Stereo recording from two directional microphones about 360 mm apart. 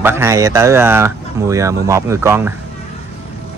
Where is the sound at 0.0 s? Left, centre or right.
Centre.